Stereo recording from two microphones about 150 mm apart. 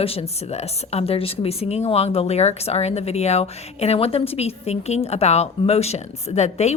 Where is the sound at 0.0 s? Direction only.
40° left (ahead or behind).